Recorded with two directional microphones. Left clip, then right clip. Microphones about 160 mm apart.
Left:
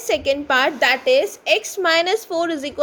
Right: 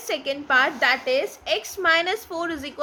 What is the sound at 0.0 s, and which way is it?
A woman's voice, 30° left (ahead or behind).